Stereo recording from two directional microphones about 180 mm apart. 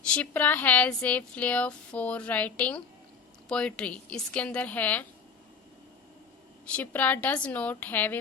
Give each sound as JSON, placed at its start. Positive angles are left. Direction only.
{"t": 0.1, "sound": "speech", "side_deg": 10}
{"t": 6.7, "sound": "speech", "side_deg": 10}